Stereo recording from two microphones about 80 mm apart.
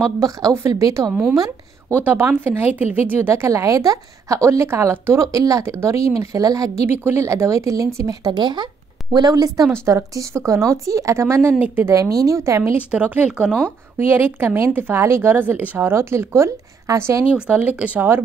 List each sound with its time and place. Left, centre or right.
0.2 s a woman's voice: right
2.0 s a woman's voice: right
5.2 s speech: right
6.9 s a woman's voice: right
8.3 s speech: right
9.1 s speech: right
9.7 s a woman's voice: right
12.7 s speech: centre
13.9 s a woman's voice: right
17.3 s speech: centre